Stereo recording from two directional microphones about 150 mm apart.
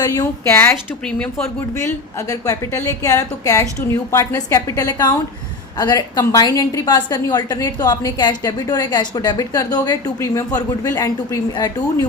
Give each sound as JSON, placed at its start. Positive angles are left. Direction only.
{"t": 0.0, "sound": "a woman's voice", "side_deg": 25}